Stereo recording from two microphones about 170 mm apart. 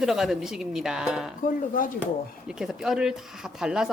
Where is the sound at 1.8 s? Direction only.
55° left (ahead or behind).